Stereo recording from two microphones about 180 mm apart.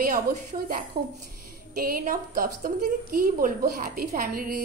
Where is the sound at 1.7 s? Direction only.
55° right (ahead or behind).